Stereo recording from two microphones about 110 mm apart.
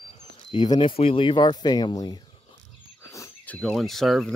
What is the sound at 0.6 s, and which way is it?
Speech, 50° left (ahead or behind).